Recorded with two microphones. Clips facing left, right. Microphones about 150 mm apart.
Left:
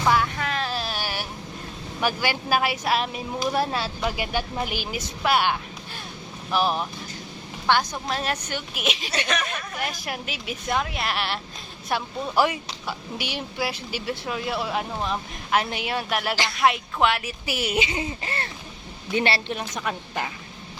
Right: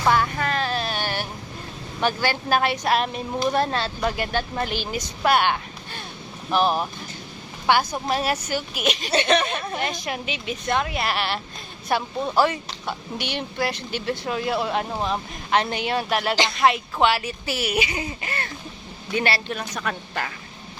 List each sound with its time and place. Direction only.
0.1 s vehicle: centre (ahead or behind)
2.0 s a woman's voice: 10° left (ahead or behind)
7.7 s a woman's voice: 10° right (ahead or behind)
9.1 s speech: 30° right (ahead or behind)
9.8 s speech: 5° left (ahead or behind)
17.4 s a woman's voice: 15° left (ahead or behind)